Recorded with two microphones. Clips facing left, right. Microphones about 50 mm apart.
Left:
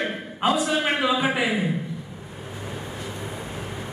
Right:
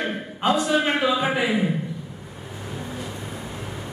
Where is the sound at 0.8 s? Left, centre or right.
Centre.